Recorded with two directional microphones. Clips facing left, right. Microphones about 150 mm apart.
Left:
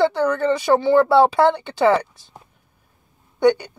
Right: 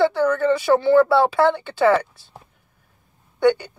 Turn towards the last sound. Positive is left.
turn(degrees=15)  # may be behind; listen again after turning